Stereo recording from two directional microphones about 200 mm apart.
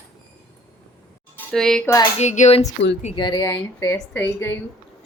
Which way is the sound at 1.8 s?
15° left (ahead or behind).